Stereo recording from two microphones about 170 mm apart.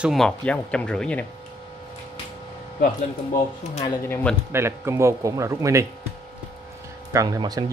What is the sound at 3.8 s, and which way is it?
Speech, 20° left (ahead or behind).